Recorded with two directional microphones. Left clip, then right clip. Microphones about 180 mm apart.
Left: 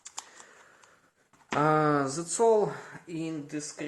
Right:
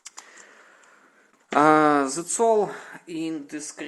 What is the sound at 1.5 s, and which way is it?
Speech, 55° right (ahead or behind).